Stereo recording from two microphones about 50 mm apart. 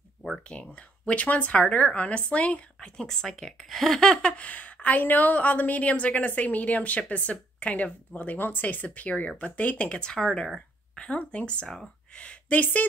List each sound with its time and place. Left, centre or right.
0.4 s speech: left
2.8 s a woman's voice: centre
10.1 s speech: centre
11.0 s a woman's voice: left